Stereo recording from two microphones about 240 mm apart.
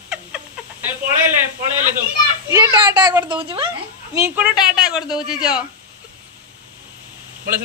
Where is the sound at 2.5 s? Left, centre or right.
Centre.